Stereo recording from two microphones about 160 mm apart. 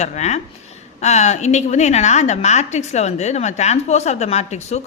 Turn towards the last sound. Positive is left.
turn(degrees=45)  # may be behind; listen again after turning